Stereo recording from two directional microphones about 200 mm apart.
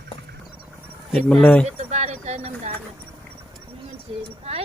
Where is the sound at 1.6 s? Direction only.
35° right (ahead or behind).